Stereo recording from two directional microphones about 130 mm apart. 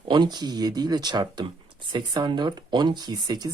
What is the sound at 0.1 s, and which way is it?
Speech, 35° right (ahead or behind).